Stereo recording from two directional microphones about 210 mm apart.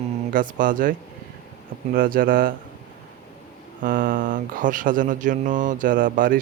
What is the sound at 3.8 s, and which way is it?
Speech, 40° right (ahead or behind).